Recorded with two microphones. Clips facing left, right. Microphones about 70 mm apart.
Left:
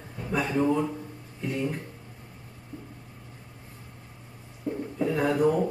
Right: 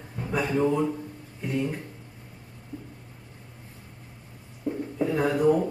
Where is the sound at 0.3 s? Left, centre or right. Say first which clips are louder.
Right 1 dB; centre.